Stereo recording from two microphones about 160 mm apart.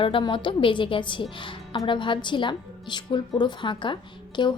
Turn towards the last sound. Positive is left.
turn(degrees=30)  # may be behind; listen again after turning